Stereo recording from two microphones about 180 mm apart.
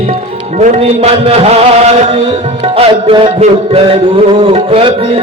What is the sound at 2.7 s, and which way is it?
Music, 30° right (ahead or behind).